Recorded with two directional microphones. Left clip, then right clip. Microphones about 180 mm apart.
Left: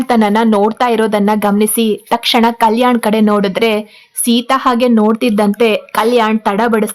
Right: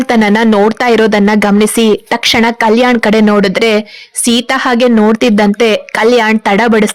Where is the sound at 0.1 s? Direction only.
20° right (ahead or behind).